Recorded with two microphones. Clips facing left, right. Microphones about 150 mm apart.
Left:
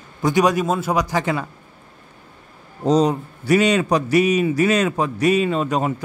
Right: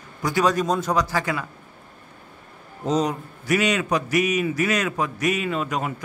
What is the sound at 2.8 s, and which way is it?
A man's voice, 30° left (ahead or behind).